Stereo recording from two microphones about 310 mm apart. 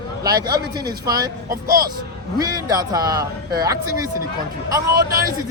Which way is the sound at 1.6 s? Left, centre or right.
Right.